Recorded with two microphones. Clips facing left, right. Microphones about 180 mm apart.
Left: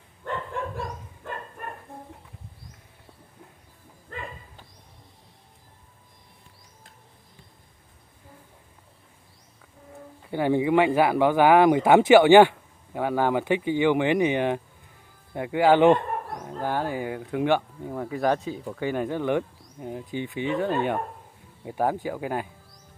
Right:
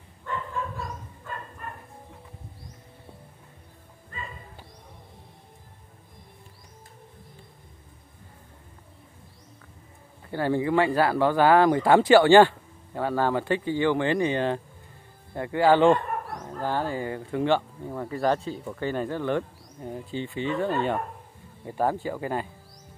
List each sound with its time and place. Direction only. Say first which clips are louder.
0.2 s dog: left 1 dB; 55° left (ahead or behind)
4.1 s dog: left 3 dB; 75° left (ahead or behind)
10.3 s speech: left 2 dB; 15° left (ahead or behind)